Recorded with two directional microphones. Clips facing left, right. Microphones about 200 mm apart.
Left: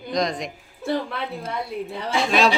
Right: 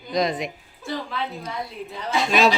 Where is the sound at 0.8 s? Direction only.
55° left (ahead or behind).